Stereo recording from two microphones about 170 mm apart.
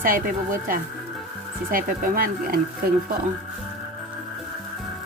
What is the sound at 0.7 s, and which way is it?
Speech, 55° right (ahead or behind).